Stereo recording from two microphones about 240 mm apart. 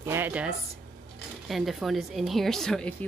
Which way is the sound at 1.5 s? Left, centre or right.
Centre.